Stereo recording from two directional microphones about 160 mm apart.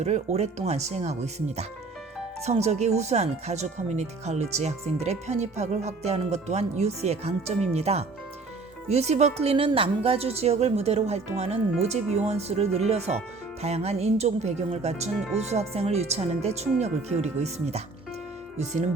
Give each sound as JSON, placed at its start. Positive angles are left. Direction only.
{"t": 0.0, "sound": "a woman's voice", "side_deg": -45}